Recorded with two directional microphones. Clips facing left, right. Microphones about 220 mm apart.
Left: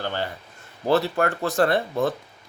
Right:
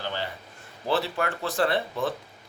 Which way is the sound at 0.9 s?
45° left (ahead or behind).